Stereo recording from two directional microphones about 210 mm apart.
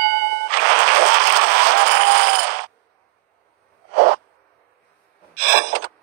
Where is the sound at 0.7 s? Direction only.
50° right (ahead or behind).